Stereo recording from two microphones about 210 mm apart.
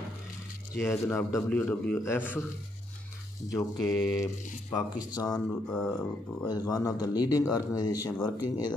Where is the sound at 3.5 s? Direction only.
15° left (ahead or behind).